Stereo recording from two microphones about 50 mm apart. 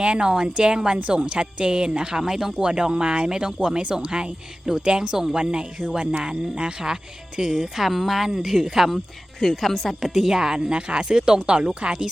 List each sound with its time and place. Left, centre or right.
0.0 s speech: centre